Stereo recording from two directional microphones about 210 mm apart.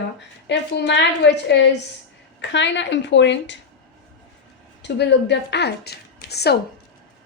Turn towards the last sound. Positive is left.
turn(degrees=50)  # may be behind; listen again after turning